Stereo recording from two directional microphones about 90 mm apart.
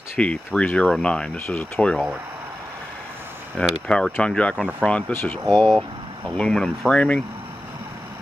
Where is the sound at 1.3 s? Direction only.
25° left (ahead or behind).